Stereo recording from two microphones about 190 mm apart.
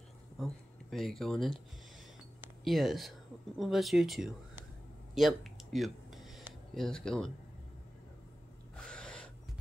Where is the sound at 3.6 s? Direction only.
Centre (ahead or behind).